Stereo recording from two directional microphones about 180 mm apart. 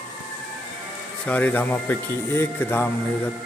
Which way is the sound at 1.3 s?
10° left (ahead or behind).